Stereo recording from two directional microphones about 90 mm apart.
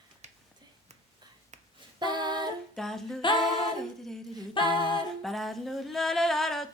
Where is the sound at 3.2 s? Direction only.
65° left (ahead or behind).